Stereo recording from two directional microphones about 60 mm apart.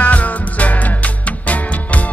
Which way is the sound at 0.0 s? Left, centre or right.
Left.